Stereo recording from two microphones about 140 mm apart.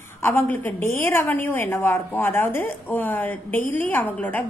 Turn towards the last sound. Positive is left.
turn(degrees=15)  # may be behind; listen again after turning